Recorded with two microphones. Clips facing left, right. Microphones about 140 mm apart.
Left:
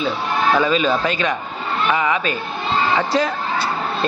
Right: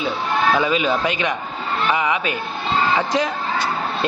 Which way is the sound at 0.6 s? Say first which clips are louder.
Left 2 dB; 15° right (ahead or behind).